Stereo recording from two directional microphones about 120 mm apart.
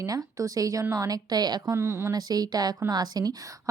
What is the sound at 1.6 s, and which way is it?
Speech, 20° right (ahead or behind).